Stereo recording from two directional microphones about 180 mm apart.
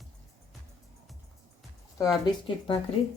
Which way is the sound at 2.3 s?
25° left (ahead or behind).